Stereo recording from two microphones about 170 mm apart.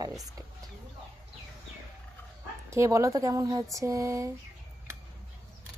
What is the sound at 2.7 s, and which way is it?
Speech, 15° right (ahead or behind).